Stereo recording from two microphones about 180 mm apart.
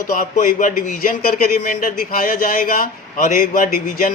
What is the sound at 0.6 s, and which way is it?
Speech, 50° left (ahead or behind).